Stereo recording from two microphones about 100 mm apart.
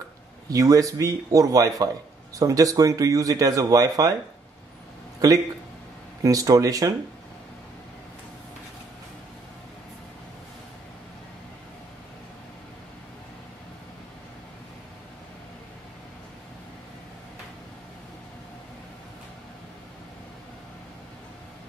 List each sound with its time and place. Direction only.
0.5 s speech: 35° right (ahead or behind)
6.2 s speech: 35° right (ahead or behind)